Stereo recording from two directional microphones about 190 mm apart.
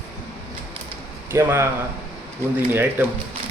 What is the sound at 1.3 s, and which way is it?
Speech, 15° right (ahead or behind).